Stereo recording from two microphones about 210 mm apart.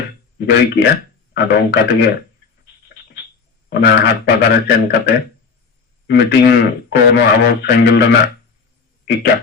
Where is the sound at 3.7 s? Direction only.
50° left (ahead or behind).